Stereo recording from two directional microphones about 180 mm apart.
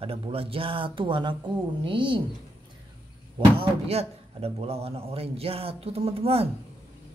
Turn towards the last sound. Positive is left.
turn(degrees=-35)  # may be behind; listen again after turning